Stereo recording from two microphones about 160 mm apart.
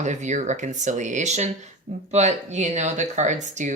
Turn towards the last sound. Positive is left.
turn(degrees=-50)  # may be behind; listen again after turning